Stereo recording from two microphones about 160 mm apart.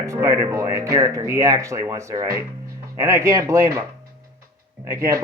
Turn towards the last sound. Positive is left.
turn(degrees=-20)  # may be behind; listen again after turning